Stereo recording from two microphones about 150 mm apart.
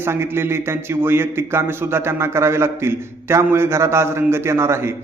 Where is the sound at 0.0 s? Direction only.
15° right (ahead or behind).